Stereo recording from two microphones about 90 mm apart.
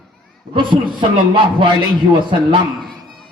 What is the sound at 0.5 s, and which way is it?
A man's voice, 65° right (ahead or behind).